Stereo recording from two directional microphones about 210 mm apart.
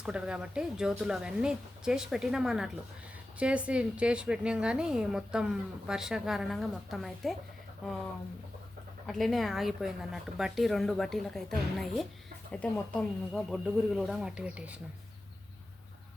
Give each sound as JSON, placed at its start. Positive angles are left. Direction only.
{"t": 0.0, "sound": "a woman's voice", "side_deg": -5}
{"t": 9.0, "sound": "a woman's voice", "side_deg": 0}